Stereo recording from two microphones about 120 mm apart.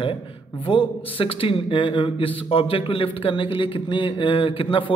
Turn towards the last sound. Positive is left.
turn(degrees=45)  # may be behind; listen again after turning